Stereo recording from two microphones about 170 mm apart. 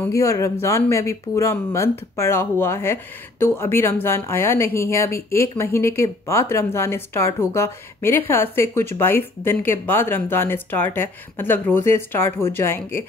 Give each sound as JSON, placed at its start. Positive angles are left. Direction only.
{"t": 0.0, "sound": "speech", "side_deg": 20}